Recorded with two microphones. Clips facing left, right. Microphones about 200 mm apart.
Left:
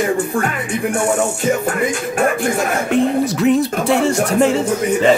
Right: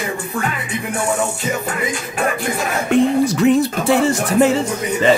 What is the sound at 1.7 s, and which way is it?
Speech, 50° left (ahead or behind).